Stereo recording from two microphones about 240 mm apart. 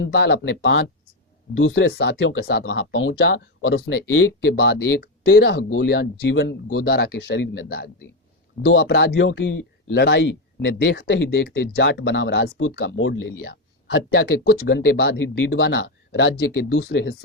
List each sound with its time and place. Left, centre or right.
0.0 s speech: left
8.6 s a man's voice: left
8.9 s speech: left